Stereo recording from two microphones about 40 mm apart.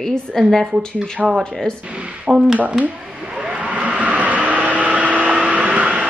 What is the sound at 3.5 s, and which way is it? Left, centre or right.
Vehicle, right.